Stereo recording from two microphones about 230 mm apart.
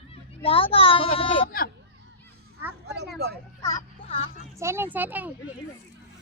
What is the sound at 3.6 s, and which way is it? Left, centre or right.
Music, centre.